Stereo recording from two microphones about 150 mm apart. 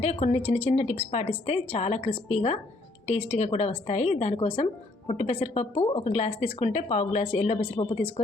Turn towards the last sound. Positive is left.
turn(degrees=35)  # may be behind; listen again after turning